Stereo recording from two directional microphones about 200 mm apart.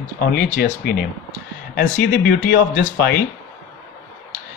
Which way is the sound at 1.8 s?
50° left (ahead or behind).